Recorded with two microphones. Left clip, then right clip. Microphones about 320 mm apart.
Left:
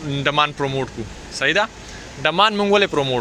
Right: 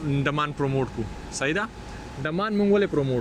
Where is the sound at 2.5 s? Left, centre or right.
Left.